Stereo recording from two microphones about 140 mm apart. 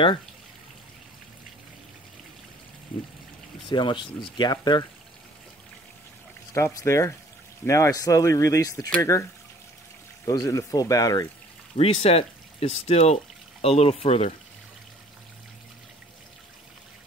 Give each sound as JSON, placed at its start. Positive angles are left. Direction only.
{"t": 3.6, "sound": "speech", "side_deg": 35}
{"t": 6.5, "sound": "speech", "side_deg": 20}
{"t": 11.7, "sound": "speech", "side_deg": 45}